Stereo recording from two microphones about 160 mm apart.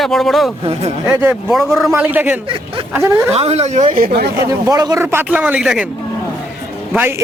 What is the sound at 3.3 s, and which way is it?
Speech, 40° right (ahead or behind).